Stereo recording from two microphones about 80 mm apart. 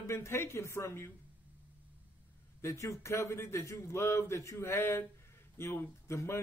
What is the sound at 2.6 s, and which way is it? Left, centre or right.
Speech, left.